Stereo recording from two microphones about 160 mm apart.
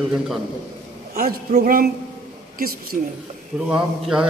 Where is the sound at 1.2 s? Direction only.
60° right (ahead or behind).